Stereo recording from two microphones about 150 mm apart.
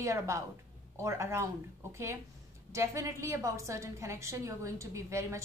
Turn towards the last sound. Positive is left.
turn(degrees=-20)  # may be behind; listen again after turning